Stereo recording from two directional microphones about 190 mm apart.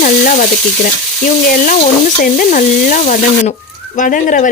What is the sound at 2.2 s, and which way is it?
Speech, 45° left (ahead or behind).